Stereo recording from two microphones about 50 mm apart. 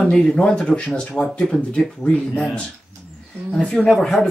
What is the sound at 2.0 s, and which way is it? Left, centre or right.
Speech, left.